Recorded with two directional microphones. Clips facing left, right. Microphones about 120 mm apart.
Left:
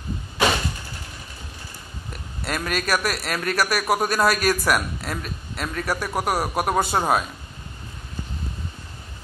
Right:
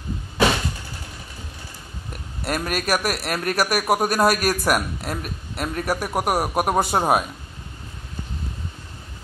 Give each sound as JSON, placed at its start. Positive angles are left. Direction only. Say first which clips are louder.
{"t": 2.4, "sound": "a man's voice", "louder": "right 1 dB", "side_deg": -10}